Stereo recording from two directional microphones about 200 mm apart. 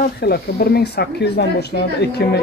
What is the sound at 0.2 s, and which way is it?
Speech, 50° left (ahead or behind).